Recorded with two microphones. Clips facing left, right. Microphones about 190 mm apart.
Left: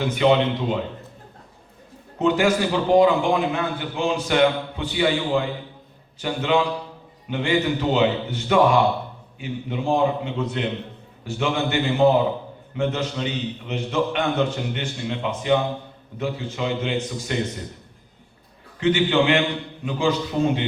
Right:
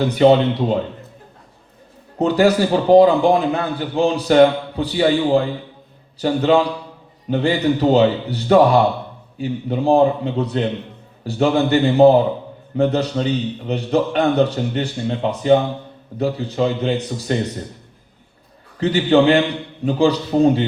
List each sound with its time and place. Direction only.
0.0 s a man's voice: 35° right (ahead or behind)
2.1 s a man's voice: 35° right (ahead or behind)
18.8 s a man's voice: 35° right (ahead or behind)